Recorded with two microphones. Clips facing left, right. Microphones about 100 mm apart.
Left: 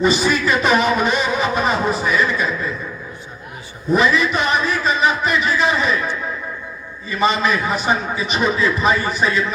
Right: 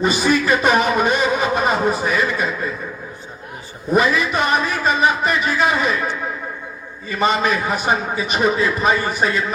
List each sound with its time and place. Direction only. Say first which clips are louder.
0.0 s a man's voice: even; 45° right (ahead or behind)
3.9 s a man's voice: even; 45° right (ahead or behind)
7.2 s a man's voice: even; 50° right (ahead or behind)